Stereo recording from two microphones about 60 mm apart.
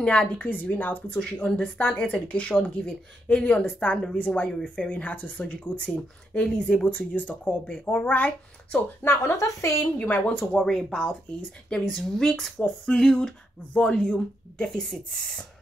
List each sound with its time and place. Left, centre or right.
0.3 s speech: left; by 6.9 s centre
6.9 s speech: left
9.0 s a woman's voice: left
9.9 s speech: left
10.6 s speech: centre